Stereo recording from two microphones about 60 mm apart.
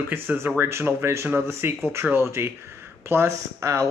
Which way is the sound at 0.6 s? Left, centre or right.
Right.